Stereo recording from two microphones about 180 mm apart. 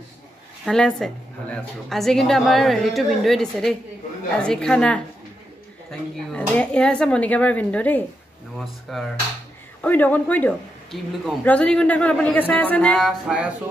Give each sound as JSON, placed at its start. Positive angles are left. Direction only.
{"t": 0.7, "sound": "a woman's voice", "side_deg": 0}